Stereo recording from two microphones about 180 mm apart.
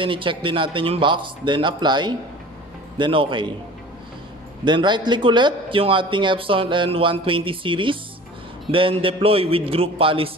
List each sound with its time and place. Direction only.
0.0 s speech: 30° right (ahead or behind)
4.6 s a man's voice: 25° right (ahead or behind)